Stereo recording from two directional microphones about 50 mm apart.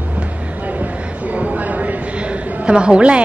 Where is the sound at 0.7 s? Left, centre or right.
Right.